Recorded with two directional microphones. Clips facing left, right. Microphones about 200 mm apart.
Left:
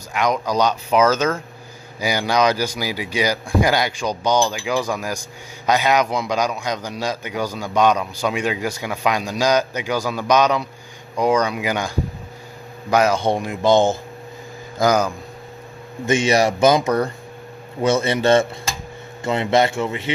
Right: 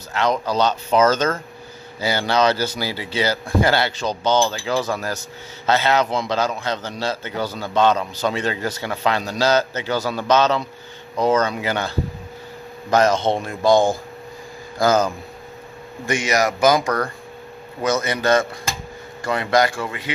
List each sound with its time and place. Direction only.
0.1 s a man's voice: 15° left (ahead or behind)
16.1 s a man's voice: 25° left (ahead or behind)
17.8 s a man's voice: 30° left (ahead or behind)